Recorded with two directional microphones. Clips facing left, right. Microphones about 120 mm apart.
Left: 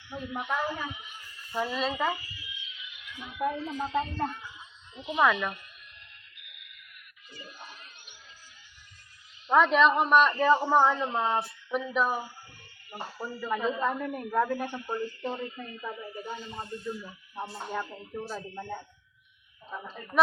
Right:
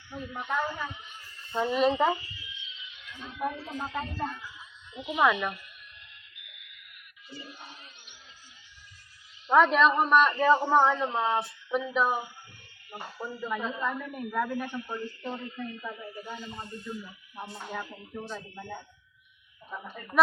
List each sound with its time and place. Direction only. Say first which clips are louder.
0.1 s a man's voice: left 1 dB; 5° left (ahead or behind)
1.5 s speech: right 5 dB; 25° right (ahead or behind)
3.2 s a man's voice: left 3 dB; 15° left (ahead or behind); by 5.2 s 30° left (ahead or behind)
5.2 s speech: even; 25° right (ahead or behind)
7.3 s a sound: right 4 dB; 35° right (ahead or behind)
7.6 s a sound: left 1 dB; 45° left (ahead or behind)
9.5 s a man's voice: even; centre (ahead or behind)
13.5 s a man's voice: left 4 dB; 35° left (ahead or behind)